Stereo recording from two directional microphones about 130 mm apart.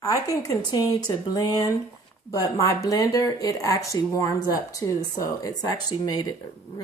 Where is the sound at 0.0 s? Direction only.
25° left (ahead or behind).